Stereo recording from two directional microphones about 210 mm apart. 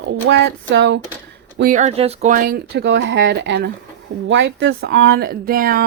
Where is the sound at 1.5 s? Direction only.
40° right (ahead or behind).